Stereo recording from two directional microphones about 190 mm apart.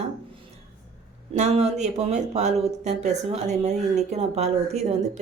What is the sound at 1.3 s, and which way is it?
A woman's voice, 35° right (ahead or behind).